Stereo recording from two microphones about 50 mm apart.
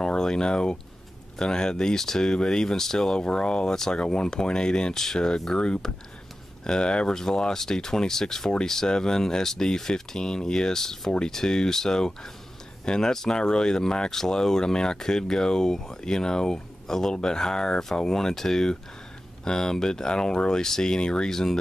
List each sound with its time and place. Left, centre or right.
0.0 s speech: centre